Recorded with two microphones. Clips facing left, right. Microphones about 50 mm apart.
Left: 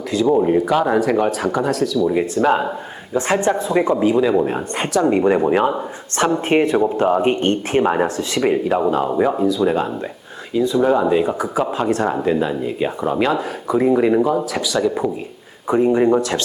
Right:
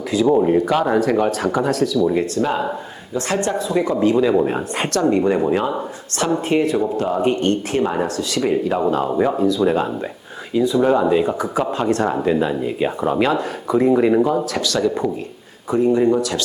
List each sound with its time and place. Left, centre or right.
0.1 s speech: centre
2.3 s speech: left
3.6 s speech: left
3.9 s speech: centre
5.0 s speech: left
6.2 s speech: left
8.7 s speech: centre
15.6 s speech: left